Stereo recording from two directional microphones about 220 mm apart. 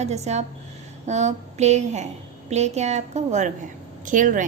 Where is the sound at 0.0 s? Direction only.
30° right (ahead or behind).